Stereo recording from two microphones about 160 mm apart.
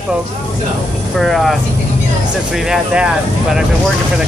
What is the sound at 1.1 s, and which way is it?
Speech, centre (ahead or behind).